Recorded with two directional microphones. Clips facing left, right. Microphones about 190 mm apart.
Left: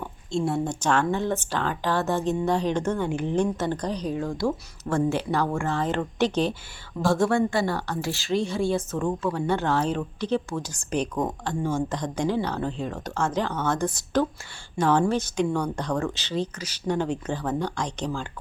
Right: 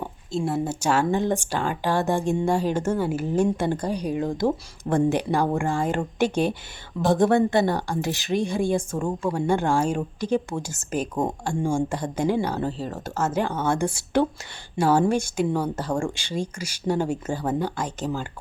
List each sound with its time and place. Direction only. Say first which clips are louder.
0.3 s speech: even; centre (ahead or behind)
11.1 s speech: right 2 dB; 30° right (ahead or behind)
11.4 s speech: right 2 dB; 10° right (ahead or behind)